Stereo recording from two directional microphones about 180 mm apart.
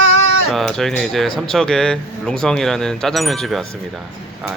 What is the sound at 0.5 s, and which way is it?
Speech, centre (ahead or behind).